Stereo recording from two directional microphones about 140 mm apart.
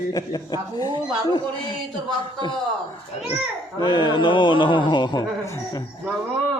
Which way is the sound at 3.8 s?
35° left (ahead or behind).